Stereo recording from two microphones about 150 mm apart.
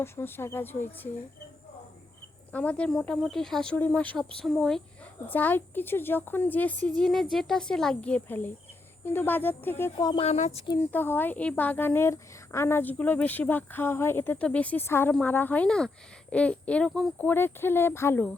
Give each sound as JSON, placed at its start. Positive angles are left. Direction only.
{"t": 0.0, "sound": "a woman's voice", "side_deg": 15}
{"t": 2.5, "sound": "a woman's voice", "side_deg": 10}
{"t": 5.3, "sound": "a woman's voice", "side_deg": 10}
{"t": 10.0, "sound": "speech", "side_deg": 30}
{"t": 10.2, "sound": "speech", "side_deg": 45}
{"t": 10.9, "sound": "a woman's voice", "side_deg": 15}